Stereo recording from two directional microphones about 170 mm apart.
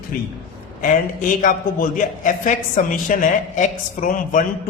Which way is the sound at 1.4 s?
50° left (ahead or behind).